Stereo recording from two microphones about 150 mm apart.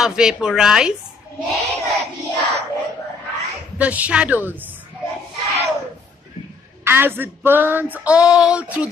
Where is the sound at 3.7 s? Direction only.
10° right (ahead or behind).